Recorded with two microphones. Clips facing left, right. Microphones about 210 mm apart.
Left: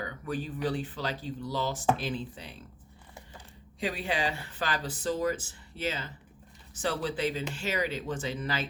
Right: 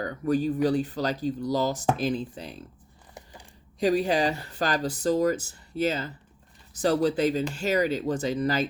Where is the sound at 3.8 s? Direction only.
40° right (ahead or behind).